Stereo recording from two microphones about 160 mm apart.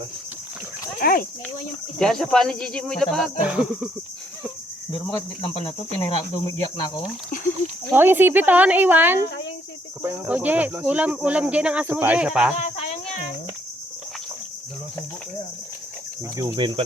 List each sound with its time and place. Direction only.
0.9 s speech: 60° left (ahead or behind)
2.0 s speech: 5° left (ahead or behind)
4.9 s speech: 35° left (ahead or behind)
7.9 s cricket: 15° right (ahead or behind)
16.4 s cricket: 30° right (ahead or behind)